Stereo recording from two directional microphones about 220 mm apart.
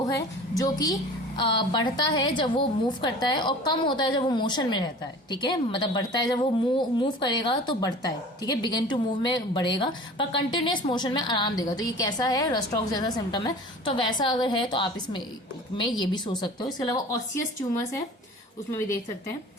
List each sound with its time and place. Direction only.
0.0 s a woman's voice: 15° left (ahead or behind)
18.7 s speech: 10° left (ahead or behind)